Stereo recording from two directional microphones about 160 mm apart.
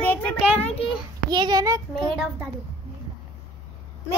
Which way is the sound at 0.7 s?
35° left (ahead or behind).